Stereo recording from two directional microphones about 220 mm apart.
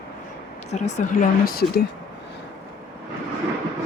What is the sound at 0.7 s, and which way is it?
Speech, 35° left (ahead or behind).